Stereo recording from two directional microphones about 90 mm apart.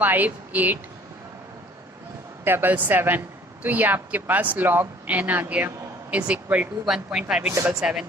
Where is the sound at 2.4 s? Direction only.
25° right (ahead or behind).